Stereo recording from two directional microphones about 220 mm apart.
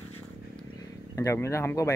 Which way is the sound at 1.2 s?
10° left (ahead or behind).